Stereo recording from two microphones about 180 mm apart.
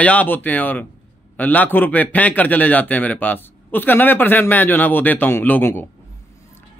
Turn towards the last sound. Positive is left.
turn(degrees=10)  # may be behind; listen again after turning